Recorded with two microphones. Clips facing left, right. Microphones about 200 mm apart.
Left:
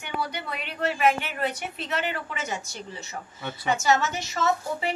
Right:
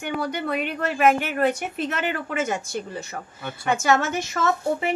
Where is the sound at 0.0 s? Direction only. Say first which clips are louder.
Right 5 dB; 50° right (ahead or behind).